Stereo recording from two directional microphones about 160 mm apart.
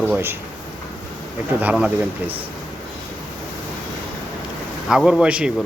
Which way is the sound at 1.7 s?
5° right (ahead or behind).